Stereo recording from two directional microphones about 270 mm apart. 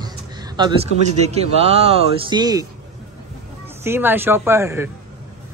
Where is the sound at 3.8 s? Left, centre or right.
Centre.